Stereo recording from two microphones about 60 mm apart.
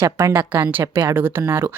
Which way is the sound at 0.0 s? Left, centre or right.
Right.